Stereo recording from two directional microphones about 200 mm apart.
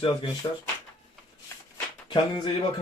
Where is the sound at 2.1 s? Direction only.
25° left (ahead or behind).